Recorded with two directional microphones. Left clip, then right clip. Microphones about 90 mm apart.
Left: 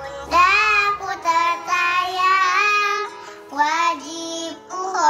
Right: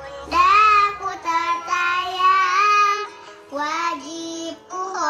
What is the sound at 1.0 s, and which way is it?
Child singing, 30° left (ahead or behind).